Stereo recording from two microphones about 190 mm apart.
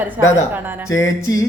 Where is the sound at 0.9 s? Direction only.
15° left (ahead or behind).